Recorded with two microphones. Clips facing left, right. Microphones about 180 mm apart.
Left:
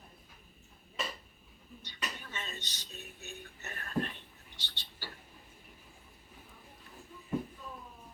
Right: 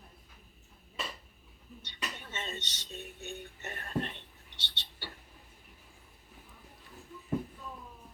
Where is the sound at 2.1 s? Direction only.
25° right (ahead or behind).